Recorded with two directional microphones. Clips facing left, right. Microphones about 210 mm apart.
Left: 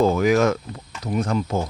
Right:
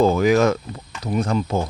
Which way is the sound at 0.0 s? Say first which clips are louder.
Right 2 dB; 30° right (ahead or behind).